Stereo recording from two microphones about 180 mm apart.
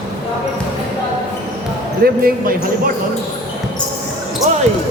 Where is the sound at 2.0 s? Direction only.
55° right (ahead or behind).